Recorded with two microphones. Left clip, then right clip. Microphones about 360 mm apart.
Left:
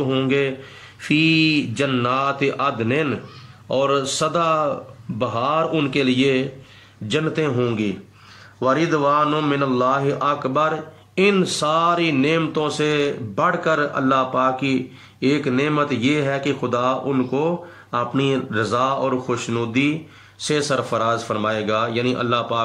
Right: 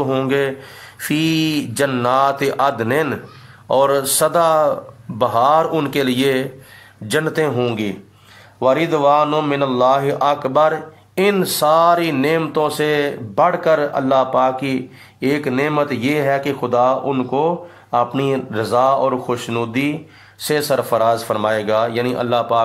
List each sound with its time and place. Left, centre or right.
0.1 s speech: centre